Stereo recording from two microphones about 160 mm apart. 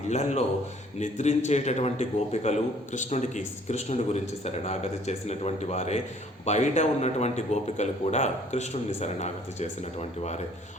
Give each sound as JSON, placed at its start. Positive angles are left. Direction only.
{"t": 0.1, "sound": "a man's voice", "side_deg": 45}